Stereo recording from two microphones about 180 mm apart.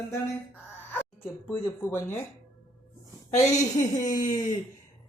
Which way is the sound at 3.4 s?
20° left (ahead or behind).